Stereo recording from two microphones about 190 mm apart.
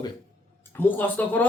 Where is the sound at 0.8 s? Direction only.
10° left (ahead or behind).